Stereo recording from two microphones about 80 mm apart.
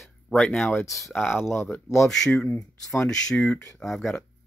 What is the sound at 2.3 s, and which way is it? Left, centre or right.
Speech, left.